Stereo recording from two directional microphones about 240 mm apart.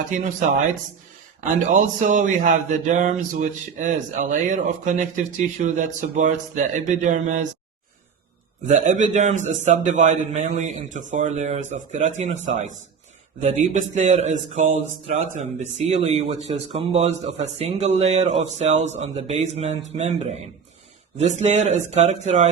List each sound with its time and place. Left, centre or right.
1.7 s speech: right
8.6 s speech: right